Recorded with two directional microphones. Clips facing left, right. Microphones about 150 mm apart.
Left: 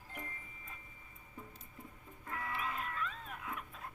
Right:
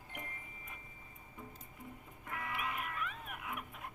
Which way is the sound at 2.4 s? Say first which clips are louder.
Even; 20° right (ahead or behind).